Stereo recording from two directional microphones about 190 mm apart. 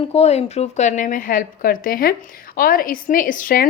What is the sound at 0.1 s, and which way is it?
A woman's voice, 35° left (ahead or behind).